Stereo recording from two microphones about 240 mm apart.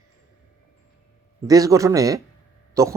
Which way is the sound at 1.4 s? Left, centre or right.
Centre.